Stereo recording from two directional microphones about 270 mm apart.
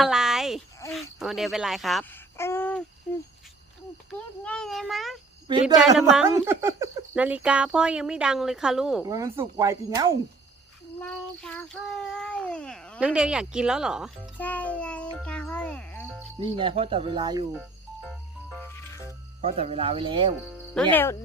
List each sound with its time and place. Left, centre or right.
0.0 s a sound: centre
4.1 s a child's voice: centre
11.0 s a child's voice: centre
16.4 s speech: centre
17.6 s music: centre
19.4 s speech: right
20.9 s speech: centre